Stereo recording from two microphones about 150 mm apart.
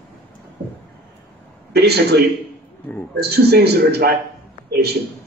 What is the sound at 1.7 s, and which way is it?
A man's voice, 90° right.